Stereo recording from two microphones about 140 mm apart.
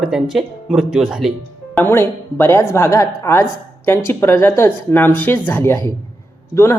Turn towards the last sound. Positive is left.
turn(degrees=20)  # may be behind; listen again after turning